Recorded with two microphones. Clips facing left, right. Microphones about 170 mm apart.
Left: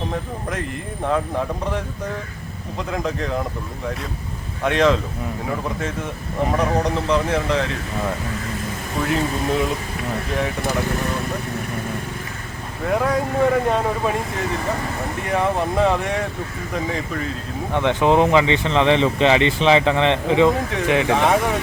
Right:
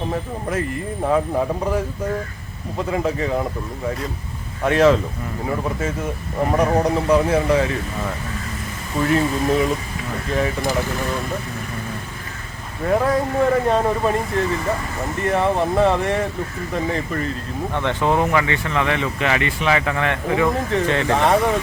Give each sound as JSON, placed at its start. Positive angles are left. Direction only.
{"t": 1.0, "sound": "speech", "side_deg": -5}
{"t": 4.6, "sound": "speech", "side_deg": -5}
{"t": 6.5, "sound": "speech", "side_deg": -10}
{"t": 9.0, "sound": "speech", "side_deg": 0}
{"t": 12.8, "sound": "speech", "side_deg": 0}
{"t": 15.2, "sound": "speech", "side_deg": 0}
{"t": 17.7, "sound": "speech", "side_deg": 15}
{"t": 20.5, "sound": "speech", "side_deg": 0}
{"t": 20.8, "sound": "speech", "side_deg": 15}
{"t": 21.2, "sound": "speech", "side_deg": 0}